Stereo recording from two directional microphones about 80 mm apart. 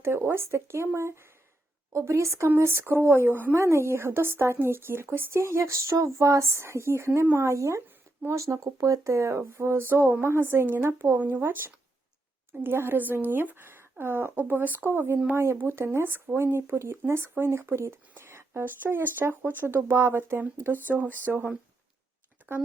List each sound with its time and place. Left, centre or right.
0.0 s speech: right